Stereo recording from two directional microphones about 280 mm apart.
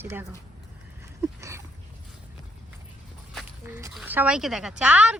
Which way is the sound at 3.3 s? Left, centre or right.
Centre.